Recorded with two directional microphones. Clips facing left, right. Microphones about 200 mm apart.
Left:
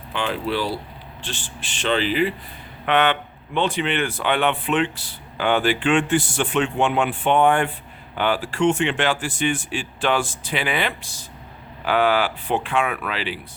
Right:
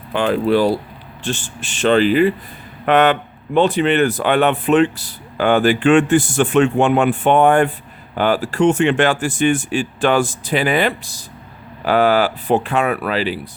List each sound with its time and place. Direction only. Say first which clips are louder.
0.1 s speech: right 9 dB; 45° right (ahead or behind)